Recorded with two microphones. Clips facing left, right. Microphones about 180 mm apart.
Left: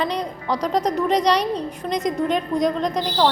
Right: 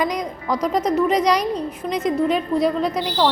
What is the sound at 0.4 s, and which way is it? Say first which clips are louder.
Speech: right 2 dB; 35° left (ahead or behind).